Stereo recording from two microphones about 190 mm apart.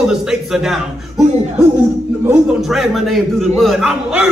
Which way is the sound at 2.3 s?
Centre (ahead or behind).